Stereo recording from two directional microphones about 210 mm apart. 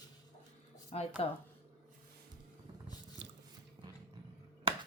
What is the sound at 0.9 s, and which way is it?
Speech, 30° left (ahead or behind).